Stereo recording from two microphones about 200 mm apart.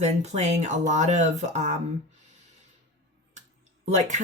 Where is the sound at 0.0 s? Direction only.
35° right (ahead or behind).